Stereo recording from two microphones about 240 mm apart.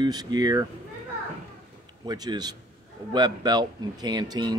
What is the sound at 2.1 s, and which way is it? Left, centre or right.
A child's voice, centre.